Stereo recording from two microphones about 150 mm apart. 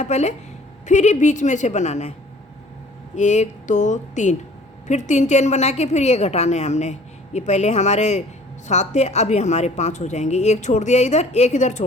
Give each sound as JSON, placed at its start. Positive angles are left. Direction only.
{"t": 0.0, "sound": "a woman's voice", "side_deg": 50}
{"t": 3.2, "sound": "a woman's voice", "side_deg": 50}